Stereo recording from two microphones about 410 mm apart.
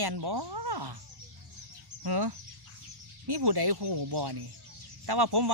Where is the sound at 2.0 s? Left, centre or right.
Right.